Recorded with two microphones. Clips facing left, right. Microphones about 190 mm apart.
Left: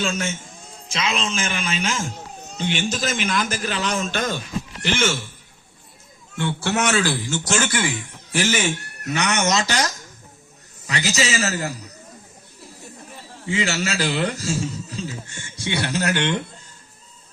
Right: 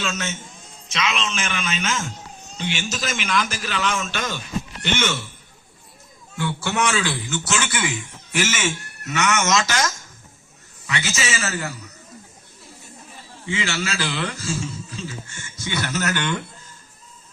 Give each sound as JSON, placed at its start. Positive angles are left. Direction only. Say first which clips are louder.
{"t": 0.0, "sound": "a man's voice", "louder": "left 3 dB", "side_deg": 30}
{"t": 2.6, "sound": "a man's voice", "louder": "left 4 dB", "side_deg": 50}
{"t": 3.7, "sound": "a man's voice", "louder": "left 1 dB", "side_deg": 35}
{"t": 6.4, "sound": "a man's voice", "louder": "left 1 dB", "side_deg": 35}
{"t": 13.4, "sound": "a man's voice", "louder": "left 3 dB", "side_deg": 35}